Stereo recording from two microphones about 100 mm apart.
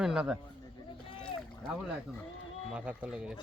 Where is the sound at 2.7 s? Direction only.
10° right (ahead or behind).